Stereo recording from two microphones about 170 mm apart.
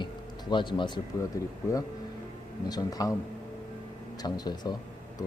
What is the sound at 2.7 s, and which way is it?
Speech, 20° left (ahead or behind).